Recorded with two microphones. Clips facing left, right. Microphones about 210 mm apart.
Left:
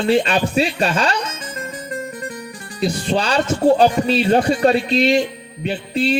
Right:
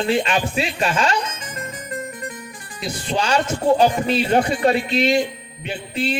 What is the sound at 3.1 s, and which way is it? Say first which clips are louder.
Speech: right 1 dB; 35° left (ahead or behind).